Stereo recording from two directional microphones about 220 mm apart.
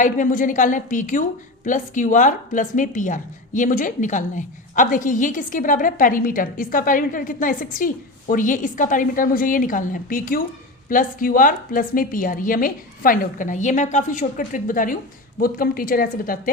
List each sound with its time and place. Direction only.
0.0 s a woman's voice: 35° left (ahead or behind)